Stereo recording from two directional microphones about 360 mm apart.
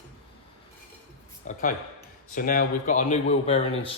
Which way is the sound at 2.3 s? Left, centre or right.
Left.